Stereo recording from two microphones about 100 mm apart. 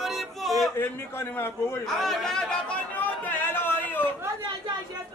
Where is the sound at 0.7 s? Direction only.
20° left (ahead or behind).